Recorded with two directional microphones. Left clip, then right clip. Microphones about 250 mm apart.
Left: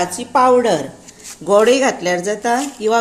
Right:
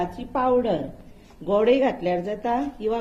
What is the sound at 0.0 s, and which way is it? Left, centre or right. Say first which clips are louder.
Speech: left 10 dB; left.